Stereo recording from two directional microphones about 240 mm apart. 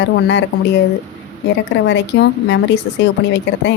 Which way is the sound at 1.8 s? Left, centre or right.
Left.